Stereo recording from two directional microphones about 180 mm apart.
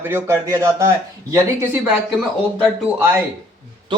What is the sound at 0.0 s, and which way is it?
Speech, 15° right (ahead or behind).